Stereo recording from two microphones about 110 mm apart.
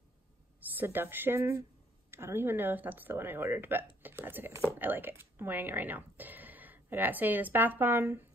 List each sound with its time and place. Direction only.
0.6 s speech: 15° right (ahead or behind)